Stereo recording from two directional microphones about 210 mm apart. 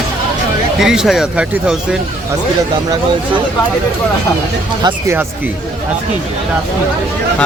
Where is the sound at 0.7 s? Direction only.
Centre (ahead or behind).